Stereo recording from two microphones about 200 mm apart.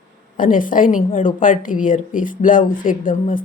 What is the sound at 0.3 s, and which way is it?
A woman's voice, 40° left (ahead or behind).